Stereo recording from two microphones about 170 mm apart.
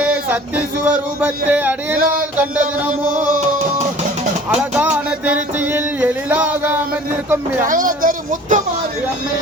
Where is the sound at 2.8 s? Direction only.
10° right (ahead or behind).